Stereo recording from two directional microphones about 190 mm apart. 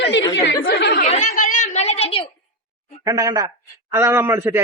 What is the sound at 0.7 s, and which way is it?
Chatter, 55° left (ahead or behind).